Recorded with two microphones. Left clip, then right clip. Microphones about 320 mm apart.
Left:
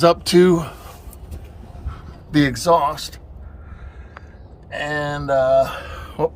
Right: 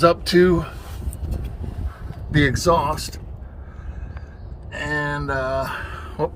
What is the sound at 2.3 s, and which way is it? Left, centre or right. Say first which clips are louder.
Speech: left 1 dB; centre.